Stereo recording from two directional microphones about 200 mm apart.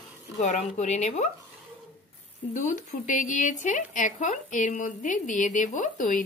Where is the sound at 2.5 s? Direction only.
40° left (ahead or behind).